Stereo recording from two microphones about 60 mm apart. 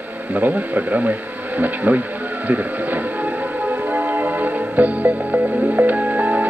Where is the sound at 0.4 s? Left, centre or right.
Right.